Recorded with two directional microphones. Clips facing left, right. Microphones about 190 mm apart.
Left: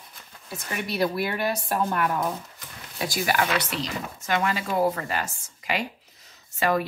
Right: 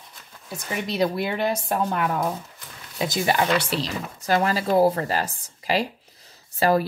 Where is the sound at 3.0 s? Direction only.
25° right (ahead or behind).